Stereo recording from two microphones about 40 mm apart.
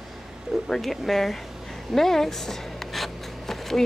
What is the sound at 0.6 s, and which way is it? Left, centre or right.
Speech, centre.